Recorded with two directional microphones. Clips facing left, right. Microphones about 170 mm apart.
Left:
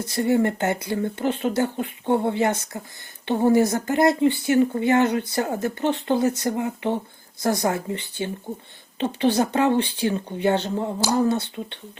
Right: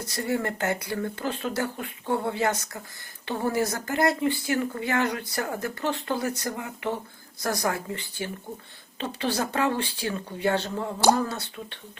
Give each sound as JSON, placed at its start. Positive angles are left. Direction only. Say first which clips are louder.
{"t": 0.0, "sound": "speech", "louder": "left 7 dB", "side_deg": 20}